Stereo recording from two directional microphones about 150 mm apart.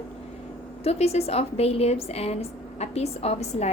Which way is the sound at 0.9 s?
45° left (ahead or behind).